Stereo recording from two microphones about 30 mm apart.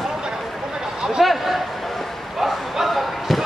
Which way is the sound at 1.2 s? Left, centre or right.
Centre.